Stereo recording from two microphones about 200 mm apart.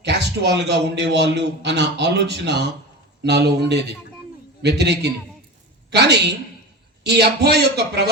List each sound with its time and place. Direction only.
0.0 s a man's voice: 60° right (ahead or behind)